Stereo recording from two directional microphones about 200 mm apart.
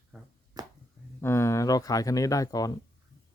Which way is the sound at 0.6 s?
20° right (ahead or behind).